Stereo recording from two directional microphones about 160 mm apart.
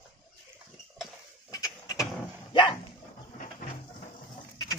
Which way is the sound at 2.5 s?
30° left (ahead or behind).